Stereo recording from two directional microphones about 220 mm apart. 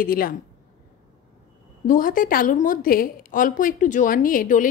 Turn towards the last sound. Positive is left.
turn(degrees=35)  # may be behind; listen again after turning